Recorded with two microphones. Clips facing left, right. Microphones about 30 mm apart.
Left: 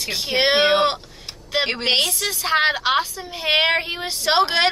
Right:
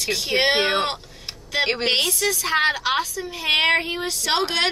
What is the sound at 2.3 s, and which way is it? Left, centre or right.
A woman's voice, left.